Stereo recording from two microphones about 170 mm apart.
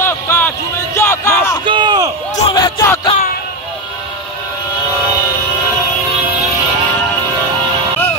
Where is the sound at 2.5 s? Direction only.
20° left (ahead or behind).